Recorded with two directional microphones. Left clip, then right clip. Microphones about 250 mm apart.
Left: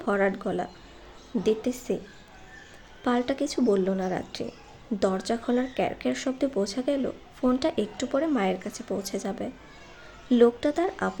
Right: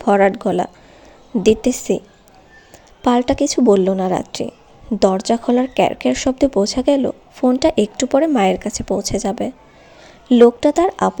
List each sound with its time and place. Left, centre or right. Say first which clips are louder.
0.0 s speech: right 12 dB; right
3.0 s speech: right 11 dB; right